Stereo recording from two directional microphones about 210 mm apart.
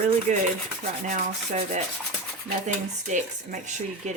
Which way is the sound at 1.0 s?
35° right (ahead or behind).